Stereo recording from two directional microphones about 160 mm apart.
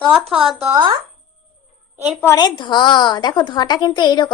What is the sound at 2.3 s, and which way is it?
A woman's voice, 25° left (ahead or behind).